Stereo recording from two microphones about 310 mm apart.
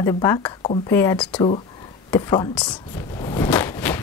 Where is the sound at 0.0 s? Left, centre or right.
Centre.